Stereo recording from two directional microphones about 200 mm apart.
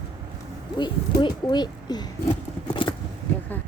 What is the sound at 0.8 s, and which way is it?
Speech, 20° left (ahead or behind).